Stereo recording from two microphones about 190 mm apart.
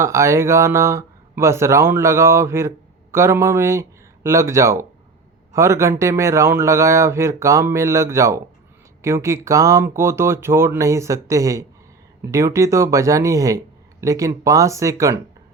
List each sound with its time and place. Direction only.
0.0 s speech: 15° right (ahead or behind)